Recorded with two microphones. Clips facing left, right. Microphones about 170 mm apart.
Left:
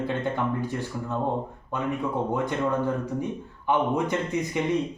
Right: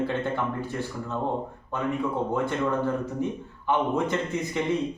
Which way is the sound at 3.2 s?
15° left (ahead or behind).